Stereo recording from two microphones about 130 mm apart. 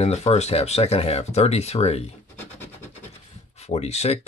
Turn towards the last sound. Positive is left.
turn(degrees=55)  # may be behind; listen again after turning